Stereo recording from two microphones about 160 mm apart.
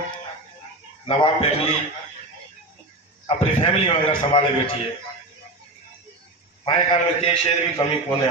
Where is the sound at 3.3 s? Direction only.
35° left (ahead or behind).